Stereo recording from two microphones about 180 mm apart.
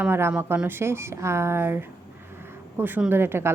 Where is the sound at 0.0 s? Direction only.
10° right (ahead or behind).